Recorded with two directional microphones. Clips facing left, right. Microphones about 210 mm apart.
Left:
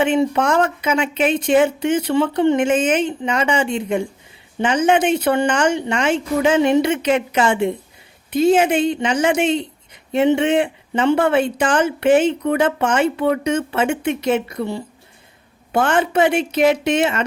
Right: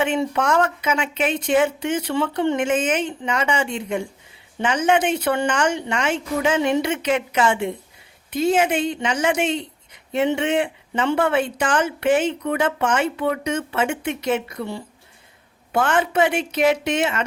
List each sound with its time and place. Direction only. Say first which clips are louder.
0.0 s speech: left 4 dB; 20° left (ahead or behind)